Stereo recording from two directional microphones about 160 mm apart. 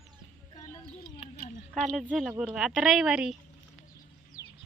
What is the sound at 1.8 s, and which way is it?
Speech, centre (ahead or behind).